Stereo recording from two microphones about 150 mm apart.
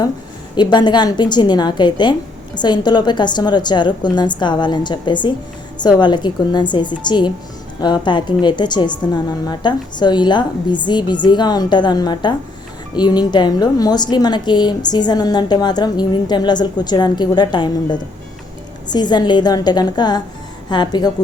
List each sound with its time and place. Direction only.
0.5 s a woman's voice: 30° left (ahead or behind)